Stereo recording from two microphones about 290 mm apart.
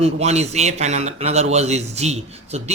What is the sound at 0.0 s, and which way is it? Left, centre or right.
Speech, right.